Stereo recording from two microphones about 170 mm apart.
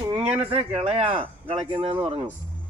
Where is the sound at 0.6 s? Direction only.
35° right (ahead or behind).